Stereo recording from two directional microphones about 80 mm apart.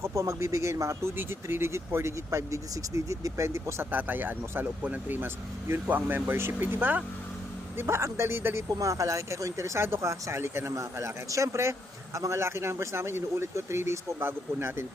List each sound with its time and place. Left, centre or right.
0.0 s speech: right
3.9 s speech: right